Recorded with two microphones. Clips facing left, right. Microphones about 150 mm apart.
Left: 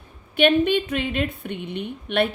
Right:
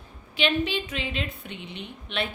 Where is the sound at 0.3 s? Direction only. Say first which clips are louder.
Left 8 dB; 55° left (ahead or behind).